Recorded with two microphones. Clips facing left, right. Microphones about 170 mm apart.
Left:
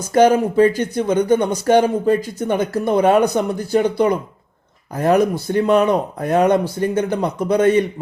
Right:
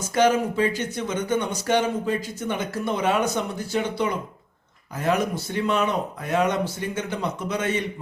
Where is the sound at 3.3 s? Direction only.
40° left (ahead or behind).